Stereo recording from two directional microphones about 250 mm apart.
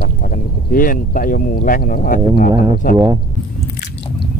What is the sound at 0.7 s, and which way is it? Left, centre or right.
Speech, left.